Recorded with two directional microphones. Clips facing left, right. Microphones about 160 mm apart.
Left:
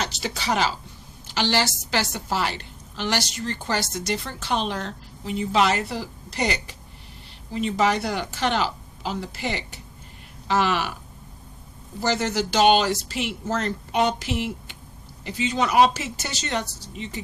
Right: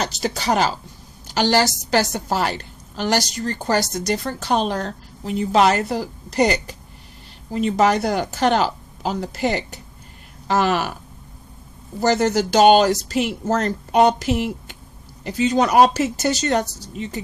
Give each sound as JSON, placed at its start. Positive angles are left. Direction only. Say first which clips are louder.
{"t": 0.0, "sound": "a woman's voice", "louder": "right 5 dB", "side_deg": -40}
{"t": 11.9, "sound": "a woman's voice", "louder": "right 6 dB", "side_deg": -40}